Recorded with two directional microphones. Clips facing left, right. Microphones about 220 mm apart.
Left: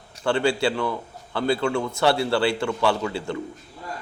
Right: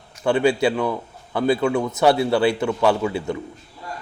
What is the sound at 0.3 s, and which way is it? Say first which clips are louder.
A man's voice: right 4 dB; 20° right (ahead or behind).